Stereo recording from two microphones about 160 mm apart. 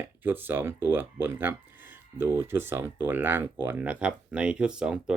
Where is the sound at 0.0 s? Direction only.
10° right (ahead or behind).